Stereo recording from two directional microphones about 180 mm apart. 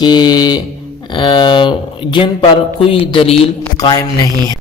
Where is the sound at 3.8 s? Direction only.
20° left (ahead or behind).